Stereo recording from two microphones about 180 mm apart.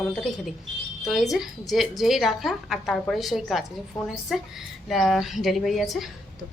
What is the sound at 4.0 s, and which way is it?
Speech, 20° left (ahead or behind).